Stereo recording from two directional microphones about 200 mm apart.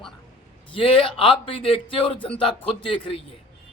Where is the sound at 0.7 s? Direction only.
25° left (ahead or behind).